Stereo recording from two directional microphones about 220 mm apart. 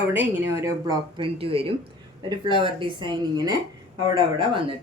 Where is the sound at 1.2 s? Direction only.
25° right (ahead or behind).